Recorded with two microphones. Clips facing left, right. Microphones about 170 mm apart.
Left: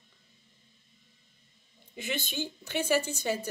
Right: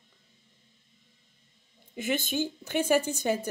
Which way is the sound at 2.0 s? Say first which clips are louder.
Right 6 dB; 50° right (ahead or behind).